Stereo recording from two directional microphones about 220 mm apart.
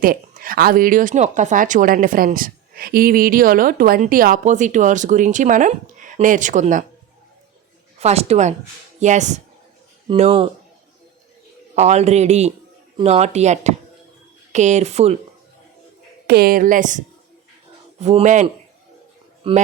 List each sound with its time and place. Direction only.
0.0 s speech: 40° right (ahead or behind)
7.9 s speech: 30° right (ahead or behind)
11.7 s speech: 30° right (ahead or behind)
16.2 s speech: 45° right (ahead or behind)
18.0 s speech: 30° right (ahead or behind)